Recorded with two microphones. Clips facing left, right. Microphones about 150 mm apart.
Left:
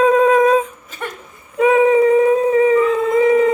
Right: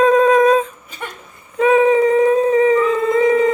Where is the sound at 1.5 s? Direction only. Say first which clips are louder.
Even; 5° left (ahead or behind).